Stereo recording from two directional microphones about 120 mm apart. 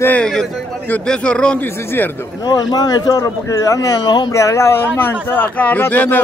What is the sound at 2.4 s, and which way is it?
Speech, 35° left (ahead or behind).